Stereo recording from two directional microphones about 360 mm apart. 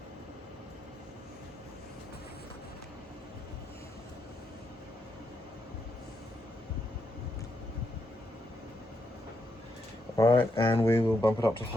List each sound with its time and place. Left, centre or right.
10.2 s speech: centre